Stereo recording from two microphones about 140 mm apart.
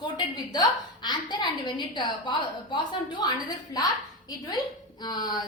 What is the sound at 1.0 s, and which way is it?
A woman's voice, 30° left (ahead or behind).